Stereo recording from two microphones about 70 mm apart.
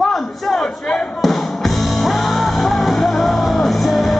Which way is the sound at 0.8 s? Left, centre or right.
Centre.